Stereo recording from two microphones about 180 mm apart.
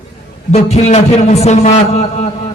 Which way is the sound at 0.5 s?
35° left (ahead or behind).